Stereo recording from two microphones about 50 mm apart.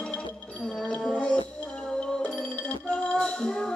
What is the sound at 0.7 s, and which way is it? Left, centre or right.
Music, centre.